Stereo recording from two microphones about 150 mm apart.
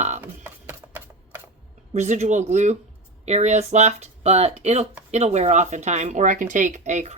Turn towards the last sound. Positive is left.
turn(degrees=-50)  # may be behind; listen again after turning